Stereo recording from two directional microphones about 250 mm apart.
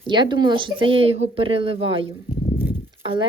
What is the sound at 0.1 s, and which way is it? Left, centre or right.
Speech, centre.